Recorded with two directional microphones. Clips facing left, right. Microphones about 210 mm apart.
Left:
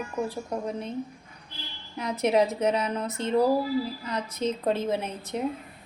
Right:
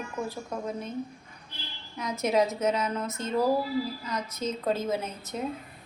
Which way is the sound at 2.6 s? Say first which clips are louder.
Left 2 dB; 30° left (ahead or behind).